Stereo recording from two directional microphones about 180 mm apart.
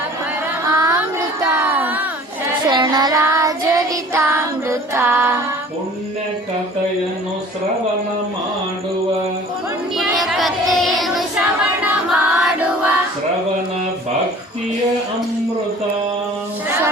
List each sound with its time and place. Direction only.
0.7 s child singing: 20° right (ahead or behind)
1.2 s crowd: 10° right (ahead or behind)
2.6 s child singing: 25° right (ahead or behind)
10.0 s child singing: centre (ahead or behind)